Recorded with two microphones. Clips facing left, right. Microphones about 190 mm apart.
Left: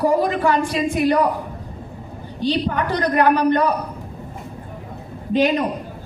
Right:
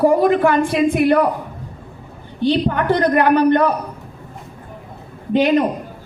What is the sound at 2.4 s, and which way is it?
A woman's voice, 55° right (ahead or behind).